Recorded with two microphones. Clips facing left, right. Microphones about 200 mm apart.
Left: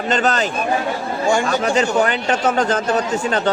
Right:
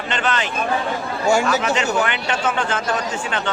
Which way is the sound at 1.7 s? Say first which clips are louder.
Left 4 dB; 35° left (ahead or behind).